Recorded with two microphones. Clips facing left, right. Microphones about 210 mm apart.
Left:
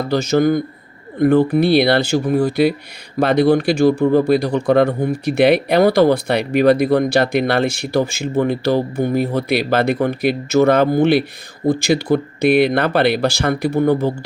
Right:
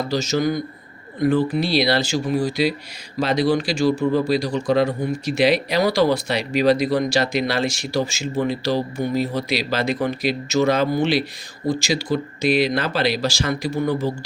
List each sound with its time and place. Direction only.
0.1 s speech: 55° left (ahead or behind)